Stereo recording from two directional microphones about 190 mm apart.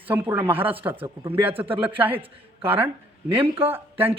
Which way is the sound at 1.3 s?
10° right (ahead or behind).